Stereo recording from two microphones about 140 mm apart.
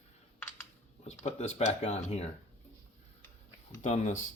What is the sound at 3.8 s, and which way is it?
Speech, 60° left (ahead or behind).